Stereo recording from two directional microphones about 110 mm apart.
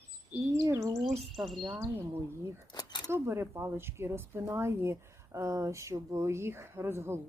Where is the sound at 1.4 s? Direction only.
Centre (ahead or behind).